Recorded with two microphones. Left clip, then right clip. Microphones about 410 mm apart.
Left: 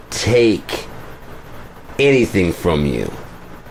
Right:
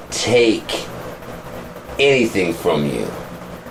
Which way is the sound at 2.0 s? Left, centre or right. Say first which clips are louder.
Left 1 dB; left.